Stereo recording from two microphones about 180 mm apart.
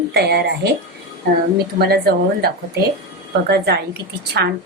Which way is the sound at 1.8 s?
60° right (ahead or behind).